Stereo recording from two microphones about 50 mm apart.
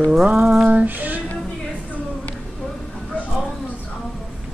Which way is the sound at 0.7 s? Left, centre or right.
Right.